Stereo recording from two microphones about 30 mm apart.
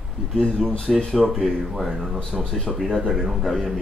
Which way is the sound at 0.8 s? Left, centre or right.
Centre.